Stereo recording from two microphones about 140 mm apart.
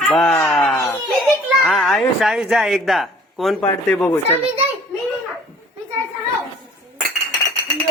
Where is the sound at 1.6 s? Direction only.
Centre (ahead or behind).